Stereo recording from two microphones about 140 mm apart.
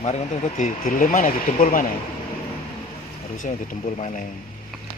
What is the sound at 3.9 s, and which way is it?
Speech, 50° left (ahead or behind).